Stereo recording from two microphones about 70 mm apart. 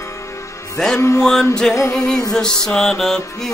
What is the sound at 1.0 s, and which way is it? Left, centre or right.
Music, left.